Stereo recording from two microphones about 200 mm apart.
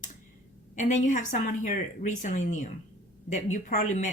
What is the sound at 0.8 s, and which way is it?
Speech, 40° left (ahead or behind).